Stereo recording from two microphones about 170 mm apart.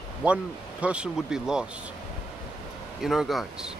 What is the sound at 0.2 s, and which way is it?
Speech, 5° right (ahead or behind).